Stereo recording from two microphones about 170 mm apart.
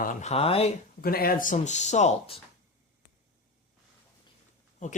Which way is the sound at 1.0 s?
60° left (ahead or behind).